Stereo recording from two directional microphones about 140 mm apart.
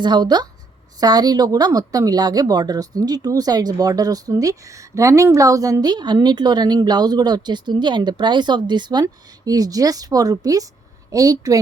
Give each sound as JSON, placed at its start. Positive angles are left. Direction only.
{"t": 0.0, "sound": "a woman's voice", "side_deg": -30}